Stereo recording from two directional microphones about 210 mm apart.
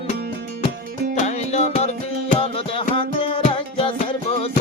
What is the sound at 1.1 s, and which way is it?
Music, 35° left (ahead or behind).